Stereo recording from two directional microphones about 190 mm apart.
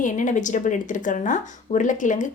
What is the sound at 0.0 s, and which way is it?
A woman's voice, 40° left (ahead or behind).